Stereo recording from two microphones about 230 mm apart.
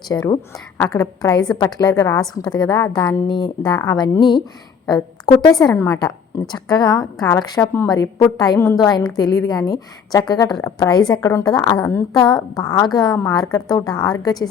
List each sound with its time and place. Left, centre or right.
0.1 s a woman's voice: centre
6.5 s a woman's voice: centre
7.0 s a woman's voice: centre
7.3 s a woman's voice: centre